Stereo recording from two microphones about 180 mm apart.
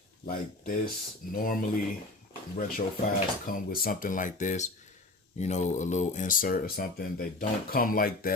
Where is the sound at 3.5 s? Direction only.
55° left (ahead or behind).